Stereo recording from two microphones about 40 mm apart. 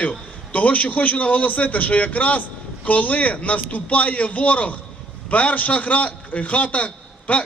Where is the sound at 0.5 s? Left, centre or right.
Left.